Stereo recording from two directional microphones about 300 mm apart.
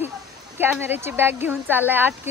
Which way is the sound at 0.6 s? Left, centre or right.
Centre.